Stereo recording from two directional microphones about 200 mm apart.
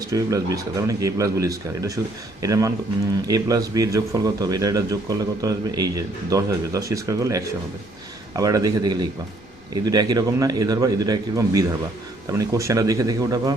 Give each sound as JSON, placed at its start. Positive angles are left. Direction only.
{"t": 0.1, "sound": "a man's voice", "side_deg": -15}